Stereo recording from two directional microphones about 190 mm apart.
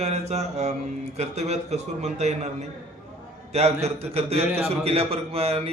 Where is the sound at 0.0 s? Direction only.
35° right (ahead or behind).